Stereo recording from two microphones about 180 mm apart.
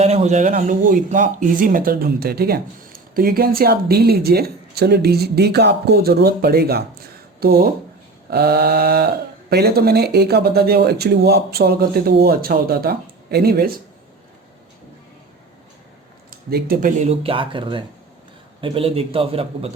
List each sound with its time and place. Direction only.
0.0 s speech: 35° right (ahead or behind); by 13.8 s 55° right (ahead or behind)
16.3 s speech: 55° right (ahead or behind)
17.0 s a man's voice: 35° right (ahead or behind)